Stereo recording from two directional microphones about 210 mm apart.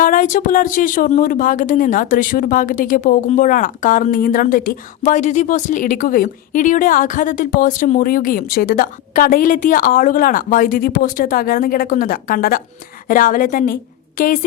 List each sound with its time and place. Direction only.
0.0 s speech: 40° left (ahead or behind)